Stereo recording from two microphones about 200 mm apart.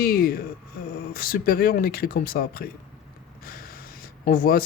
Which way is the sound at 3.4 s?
50° left (ahead or behind).